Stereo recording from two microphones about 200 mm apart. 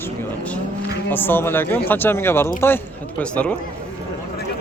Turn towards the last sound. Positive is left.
turn(degrees=5)  # may be behind; listen again after turning